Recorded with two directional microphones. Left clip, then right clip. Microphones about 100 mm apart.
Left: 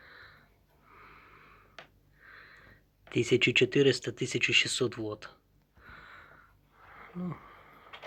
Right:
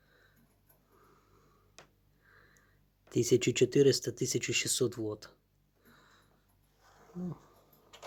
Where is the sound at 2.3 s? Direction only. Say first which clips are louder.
Left 10 dB; 55° right (ahead or behind).